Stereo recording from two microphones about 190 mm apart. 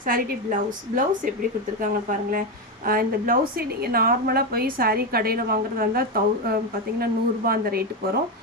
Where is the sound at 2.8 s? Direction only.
50° right (ahead or behind).